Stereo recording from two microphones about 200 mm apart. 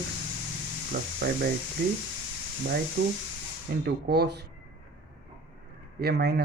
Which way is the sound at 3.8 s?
55° right (ahead or behind).